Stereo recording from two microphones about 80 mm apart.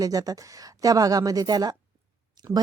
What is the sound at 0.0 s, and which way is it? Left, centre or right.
Speech, right.